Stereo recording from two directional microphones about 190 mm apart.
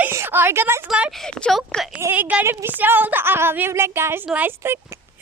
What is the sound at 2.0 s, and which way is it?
Speech, 10° right (ahead or behind).